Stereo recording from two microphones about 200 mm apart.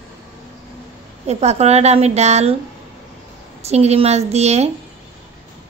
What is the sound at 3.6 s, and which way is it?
A woman's voice, 30° right (ahead or behind).